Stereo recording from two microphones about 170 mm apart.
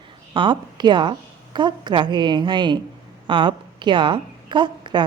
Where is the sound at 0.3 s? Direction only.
25° right (ahead or behind).